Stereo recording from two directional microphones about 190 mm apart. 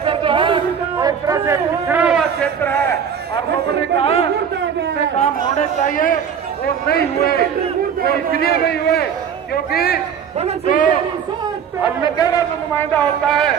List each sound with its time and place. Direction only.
0.0 s a sound: 30° right (ahead or behind)
0.9 s a man's voice: 20° right (ahead or behind)
2.4 s a man's voice: 10° left (ahead or behind)
4.0 s speech: 30° left (ahead or behind)
5.2 s a man's voice: 40° left (ahead or behind)
11.8 s a man's voice: 20° left (ahead or behind); by 13.6 s 5° left (ahead or behind)